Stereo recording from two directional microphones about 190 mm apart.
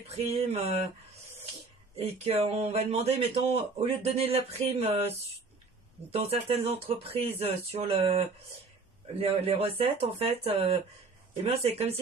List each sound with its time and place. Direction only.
0.1 s speech: 35° right (ahead or behind)
2.0 s speech: 30° right (ahead or behind)